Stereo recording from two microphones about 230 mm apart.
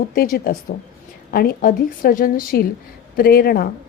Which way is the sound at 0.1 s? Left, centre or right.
Left.